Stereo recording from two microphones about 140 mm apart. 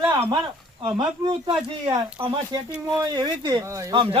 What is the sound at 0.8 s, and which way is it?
Speech, 30° right (ahead or behind).